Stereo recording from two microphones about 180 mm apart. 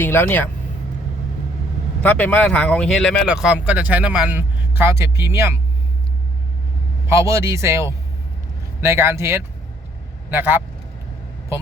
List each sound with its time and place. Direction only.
0.0 s speech: 10° left (ahead or behind)
2.0 s speech: 10° left (ahead or behind); by 5.5 s 15° right (ahead or behind)
7.1 s speech: 15° right (ahead or behind)